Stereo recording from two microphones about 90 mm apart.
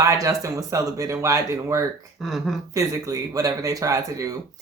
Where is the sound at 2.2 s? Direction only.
Centre (ahead or behind).